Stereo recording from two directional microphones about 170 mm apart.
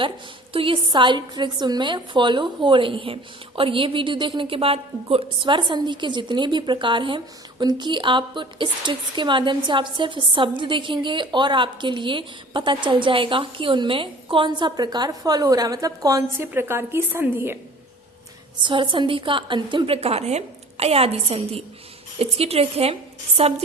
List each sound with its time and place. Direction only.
0.5 s a woman's voice: 30° right (ahead or behind); by 17.6 s 15° right (ahead or behind)
18.6 s a woman's voice: 30° right (ahead or behind)